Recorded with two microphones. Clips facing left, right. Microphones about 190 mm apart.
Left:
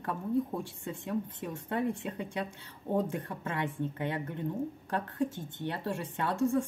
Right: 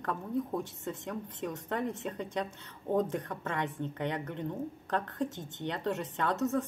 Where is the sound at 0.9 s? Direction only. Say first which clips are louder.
Left 3 dB; 10° left (ahead or behind).